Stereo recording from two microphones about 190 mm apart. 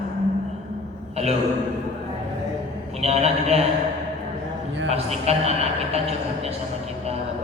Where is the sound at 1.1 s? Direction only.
35° right (ahead or behind).